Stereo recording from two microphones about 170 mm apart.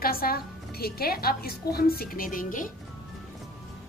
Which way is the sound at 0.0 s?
60° left (ahead or behind).